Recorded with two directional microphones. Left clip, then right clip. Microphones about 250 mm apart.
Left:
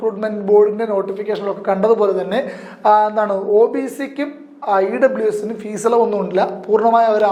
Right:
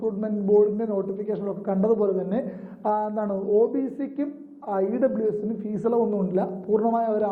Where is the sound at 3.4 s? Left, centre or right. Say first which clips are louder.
Left 6 dB; left.